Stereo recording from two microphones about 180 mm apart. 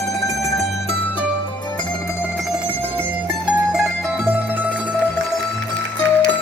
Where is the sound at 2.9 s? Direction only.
10° right (ahead or behind).